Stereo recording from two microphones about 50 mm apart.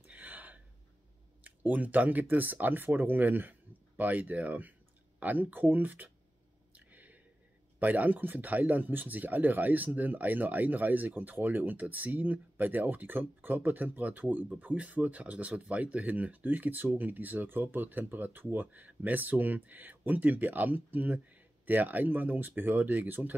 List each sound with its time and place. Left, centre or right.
0.0 s gasp: right
1.4 s speech: right
6.7 s a sound: right
7.8 s speech: right